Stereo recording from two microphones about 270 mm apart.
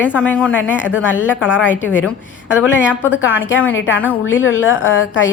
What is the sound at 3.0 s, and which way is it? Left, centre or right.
A woman's voice, left.